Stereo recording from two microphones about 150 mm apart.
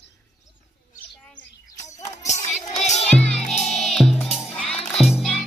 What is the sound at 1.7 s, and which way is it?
Music, 50° left (ahead or behind).